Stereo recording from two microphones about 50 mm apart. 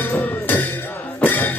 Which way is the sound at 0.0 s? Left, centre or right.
Left.